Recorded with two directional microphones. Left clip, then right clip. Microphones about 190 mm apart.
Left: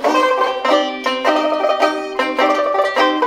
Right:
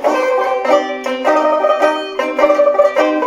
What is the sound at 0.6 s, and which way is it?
Music, 20° left (ahead or behind).